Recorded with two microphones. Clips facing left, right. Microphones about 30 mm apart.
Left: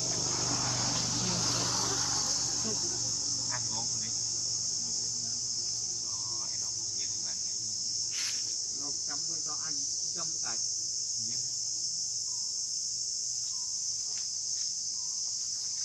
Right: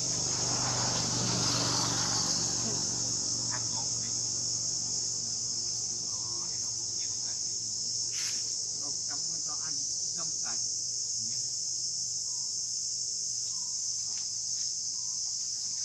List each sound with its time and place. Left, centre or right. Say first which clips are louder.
0.0 s vehicle: even; centre
1.4 s vehicle: right 1 dB; centre